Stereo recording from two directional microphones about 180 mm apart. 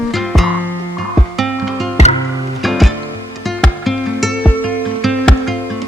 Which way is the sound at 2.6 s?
Centre (ahead or behind).